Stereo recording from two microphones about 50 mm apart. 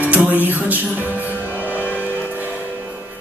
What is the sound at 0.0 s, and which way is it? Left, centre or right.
Music, right.